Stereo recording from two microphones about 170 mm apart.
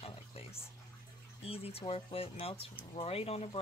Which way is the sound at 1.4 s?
35° left (ahead or behind).